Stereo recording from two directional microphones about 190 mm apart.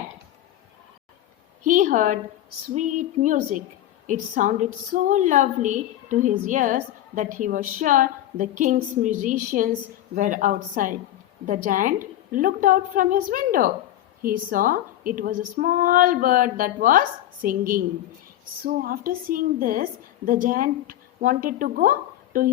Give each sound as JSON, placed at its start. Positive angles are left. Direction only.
{"t": 1.6, "sound": "a woman's voice", "side_deg": -45}